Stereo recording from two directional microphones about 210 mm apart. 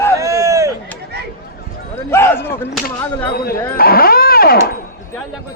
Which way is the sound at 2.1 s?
10° left (ahead or behind).